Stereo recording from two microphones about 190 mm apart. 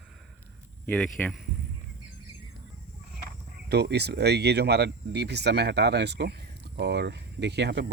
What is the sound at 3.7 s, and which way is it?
Speech, 60° right (ahead or behind).